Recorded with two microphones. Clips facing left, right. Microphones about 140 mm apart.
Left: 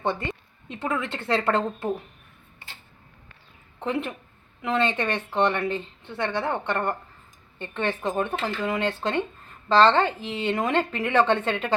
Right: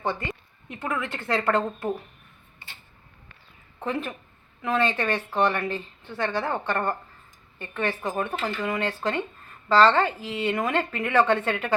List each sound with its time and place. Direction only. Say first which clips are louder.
0.0 s a woman's voice: left 2 dB; 25° left (ahead or behind)
3.8 s a woman's voice: left 2 dB; 20° left (ahead or behind)